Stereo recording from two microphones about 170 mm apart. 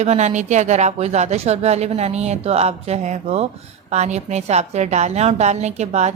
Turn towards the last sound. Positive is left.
turn(degrees=-40)  # may be behind; listen again after turning